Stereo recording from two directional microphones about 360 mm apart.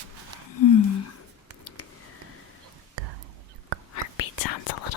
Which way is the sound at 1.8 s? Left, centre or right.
Left.